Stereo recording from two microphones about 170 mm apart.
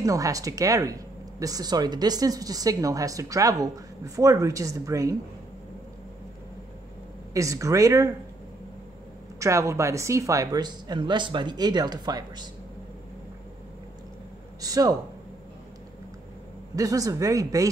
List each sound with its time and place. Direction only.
0.0 s speech: 20° right (ahead or behind)
7.3 s speech: 20° right (ahead or behind)
9.4 s speech: 15° right (ahead or behind)
14.6 s speech: 20° right (ahead or behind)
16.7 s speech: 20° right (ahead or behind)